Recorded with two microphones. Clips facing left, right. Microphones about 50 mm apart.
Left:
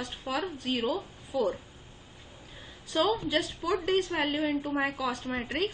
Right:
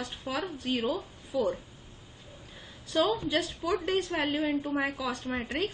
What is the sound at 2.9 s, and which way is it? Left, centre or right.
A woman's voice, centre.